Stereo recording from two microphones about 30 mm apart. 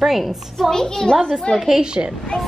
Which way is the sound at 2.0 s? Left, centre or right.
Right.